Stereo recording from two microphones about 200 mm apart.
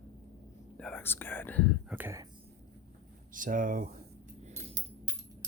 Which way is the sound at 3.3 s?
40° right (ahead or behind).